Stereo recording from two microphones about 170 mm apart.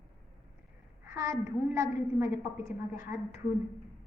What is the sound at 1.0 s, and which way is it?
A woman's voice, 15° right (ahead or behind).